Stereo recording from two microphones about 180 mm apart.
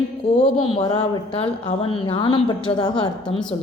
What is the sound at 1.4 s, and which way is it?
A woman's voice, 30° left (ahead or behind).